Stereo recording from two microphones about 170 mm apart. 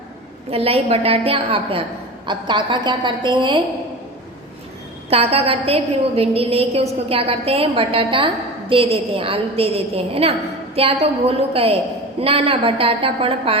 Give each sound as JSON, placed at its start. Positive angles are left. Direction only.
{"t": 0.5, "sound": "a woman's voice", "side_deg": -35}
{"t": 5.0, "sound": "a woman's voice", "side_deg": -35}